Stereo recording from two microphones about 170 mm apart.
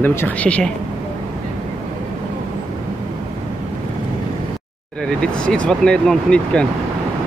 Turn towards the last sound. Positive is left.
turn(degrees=5)  # may be behind; listen again after turning